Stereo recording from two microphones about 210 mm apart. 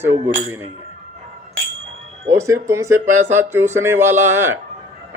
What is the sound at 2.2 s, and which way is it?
A man's voice, 15° right (ahead or behind).